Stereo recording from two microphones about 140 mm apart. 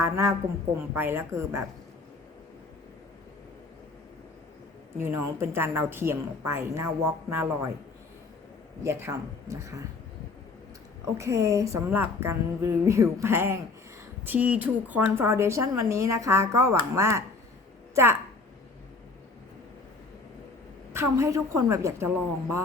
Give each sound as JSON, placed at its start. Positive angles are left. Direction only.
{"t": 0.0, "sound": "a woman's voice", "side_deg": -20}
{"t": 4.9, "sound": "a woman's voice", "side_deg": -15}
{"t": 8.8, "sound": "a woman's voice", "side_deg": -20}
{"t": 11.2, "sound": "a woman's voice", "side_deg": -20}
{"t": 20.9, "sound": "a woman's voice", "side_deg": -20}